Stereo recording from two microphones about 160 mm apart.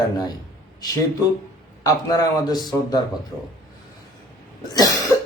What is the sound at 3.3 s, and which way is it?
Speech, 5° left (ahead or behind).